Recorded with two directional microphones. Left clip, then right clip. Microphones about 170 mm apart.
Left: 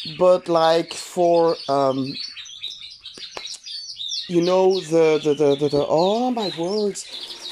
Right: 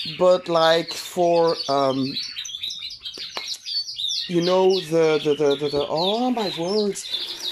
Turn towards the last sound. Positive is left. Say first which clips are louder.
# even
turn(degrees=10)  # may be behind; listen again after turning